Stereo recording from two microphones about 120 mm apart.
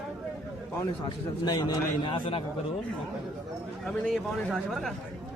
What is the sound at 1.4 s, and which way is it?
A man's voice, 35° left (ahead or behind).